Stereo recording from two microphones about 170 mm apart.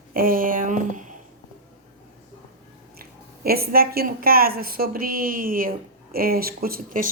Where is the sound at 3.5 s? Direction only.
60° right (ahead or behind).